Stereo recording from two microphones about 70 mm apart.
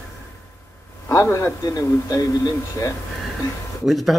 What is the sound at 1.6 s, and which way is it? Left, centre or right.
Speech, left.